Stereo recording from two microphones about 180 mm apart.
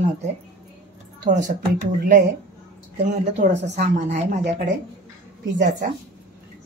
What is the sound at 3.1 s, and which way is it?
A woman's voice, 45° right (ahead or behind).